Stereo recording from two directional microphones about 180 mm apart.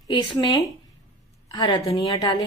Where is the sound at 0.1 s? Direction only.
25° left (ahead or behind).